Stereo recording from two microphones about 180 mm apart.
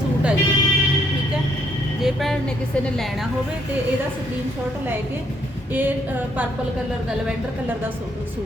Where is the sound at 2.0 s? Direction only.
Centre (ahead or behind).